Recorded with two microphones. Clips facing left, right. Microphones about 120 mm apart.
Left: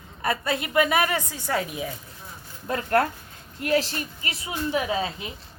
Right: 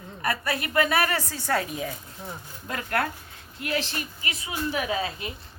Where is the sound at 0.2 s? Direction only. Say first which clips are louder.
Left 2 dB; 25° left (ahead or behind).